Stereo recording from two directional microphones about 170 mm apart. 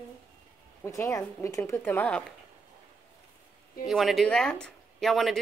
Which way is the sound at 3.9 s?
Centre (ahead or behind).